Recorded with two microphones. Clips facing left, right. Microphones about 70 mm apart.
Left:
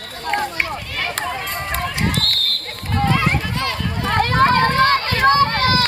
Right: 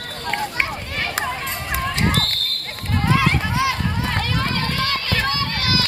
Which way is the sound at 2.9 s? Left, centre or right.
Centre.